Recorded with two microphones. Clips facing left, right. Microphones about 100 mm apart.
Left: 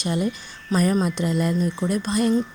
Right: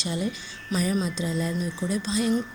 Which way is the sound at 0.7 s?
35° left (ahead or behind).